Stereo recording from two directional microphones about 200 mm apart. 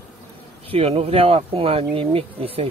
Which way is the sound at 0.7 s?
30° right (ahead or behind).